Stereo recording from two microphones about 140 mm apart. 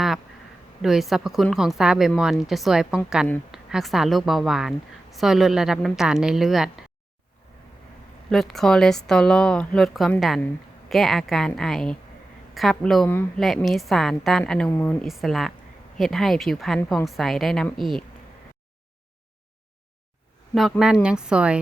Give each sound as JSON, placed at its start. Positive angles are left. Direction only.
{"t": 0.8, "sound": "a woman's voice", "side_deg": 0}
{"t": 8.3, "sound": "a woman's voice", "side_deg": 0}
{"t": 13.1, "sound": "speech", "side_deg": 15}
{"t": 13.4, "sound": "a woman's voice", "side_deg": 0}
{"t": 15.0, "sound": "a woman's voice", "side_deg": 0}
{"t": 20.6, "sound": "a woman's voice", "side_deg": 0}